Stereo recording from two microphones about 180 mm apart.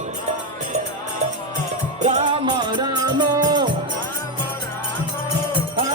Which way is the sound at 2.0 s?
40° right (ahead or behind).